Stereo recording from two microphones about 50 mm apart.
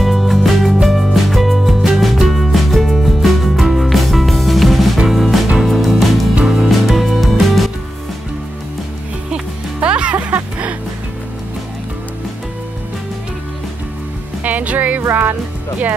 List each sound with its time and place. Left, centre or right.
0.0 s music: centre
9.3 s music: right
14.4 s music: right